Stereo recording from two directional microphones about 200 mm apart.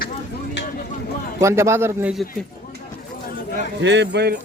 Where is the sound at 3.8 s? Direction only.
60° right (ahead or behind).